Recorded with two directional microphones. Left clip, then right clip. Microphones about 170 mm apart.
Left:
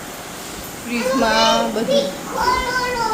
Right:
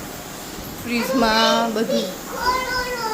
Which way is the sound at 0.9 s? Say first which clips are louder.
Left 1 dB; 25° right (ahead or behind).